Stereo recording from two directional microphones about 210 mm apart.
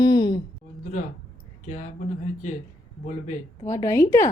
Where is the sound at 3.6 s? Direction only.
15° left (ahead or behind).